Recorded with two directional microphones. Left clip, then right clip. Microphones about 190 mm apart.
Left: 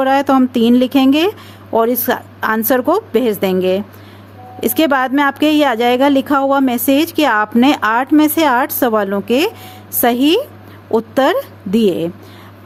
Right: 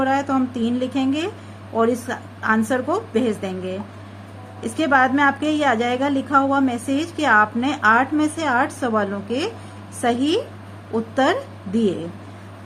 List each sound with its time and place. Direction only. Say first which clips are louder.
0.0 s a woman's voice: left 8 dB; 65° left (ahead or behind)